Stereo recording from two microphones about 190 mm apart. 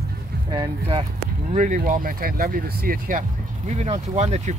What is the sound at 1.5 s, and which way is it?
Speech, 40° right (ahead or behind).